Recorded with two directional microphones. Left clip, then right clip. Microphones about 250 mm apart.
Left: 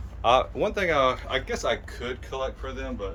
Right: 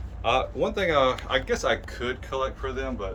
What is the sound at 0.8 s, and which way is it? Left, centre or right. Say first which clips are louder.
Speech: right 1 dB; centre.